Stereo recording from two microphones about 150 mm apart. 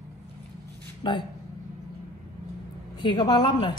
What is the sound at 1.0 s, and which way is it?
Speech, 30° left (ahead or behind).